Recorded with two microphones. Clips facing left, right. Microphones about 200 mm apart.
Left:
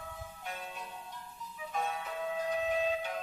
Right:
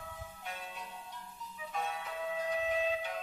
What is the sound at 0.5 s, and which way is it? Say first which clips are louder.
Music: left 2 dB; 45° left (ahead or behind).